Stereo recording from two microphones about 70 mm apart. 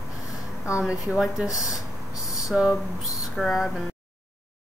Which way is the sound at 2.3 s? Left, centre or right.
Centre.